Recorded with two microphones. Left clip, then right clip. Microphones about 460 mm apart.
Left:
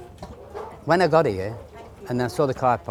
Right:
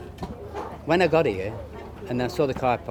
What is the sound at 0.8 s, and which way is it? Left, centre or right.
Speech, left.